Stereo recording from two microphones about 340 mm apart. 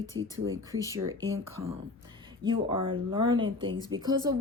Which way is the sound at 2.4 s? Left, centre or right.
Centre.